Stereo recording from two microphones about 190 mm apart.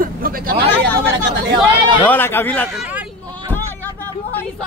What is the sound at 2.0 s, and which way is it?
Speech, 10° left (ahead or behind).